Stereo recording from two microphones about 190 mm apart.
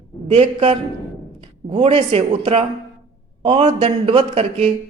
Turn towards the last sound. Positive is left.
turn(degrees=-30)  # may be behind; listen again after turning